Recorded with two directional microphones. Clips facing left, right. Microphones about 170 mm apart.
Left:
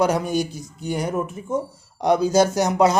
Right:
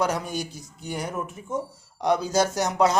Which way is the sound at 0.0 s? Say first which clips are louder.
Left 6 dB; 15° left (ahead or behind).